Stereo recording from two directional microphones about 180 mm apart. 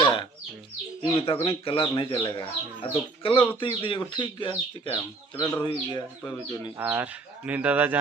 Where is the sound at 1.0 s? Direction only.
25° left (ahead or behind).